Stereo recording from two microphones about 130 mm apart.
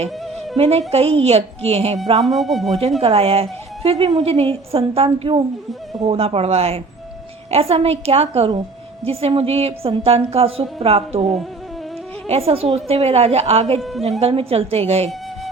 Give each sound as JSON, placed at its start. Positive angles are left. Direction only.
{"t": 0.5, "sound": "a woman's voice", "side_deg": -50}
{"t": 2.2, "sound": "flute", "side_deg": 0}
{"t": 3.0, "sound": "a woman's voice", "side_deg": -50}
{"t": 12.3, "sound": "a woman's voice", "side_deg": -50}